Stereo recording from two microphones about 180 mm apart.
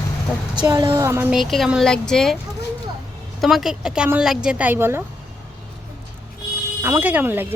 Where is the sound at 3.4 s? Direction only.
Centre (ahead or behind).